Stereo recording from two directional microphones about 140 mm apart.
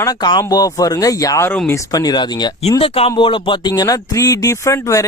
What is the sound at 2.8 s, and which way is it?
Speech, 40° left (ahead or behind).